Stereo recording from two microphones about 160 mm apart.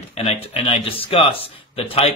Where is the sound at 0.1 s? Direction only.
45° left (ahead or behind).